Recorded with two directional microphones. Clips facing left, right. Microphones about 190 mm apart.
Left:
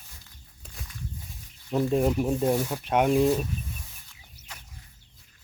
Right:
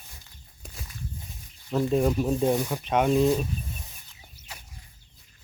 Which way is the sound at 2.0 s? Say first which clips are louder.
Right 1 dB; 10° left (ahead or behind).